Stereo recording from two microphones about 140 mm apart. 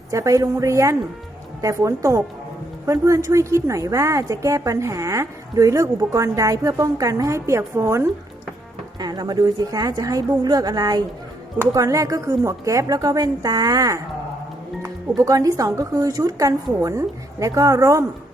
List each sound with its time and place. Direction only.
0.1 s a woman's voice: 20° right (ahead or behind)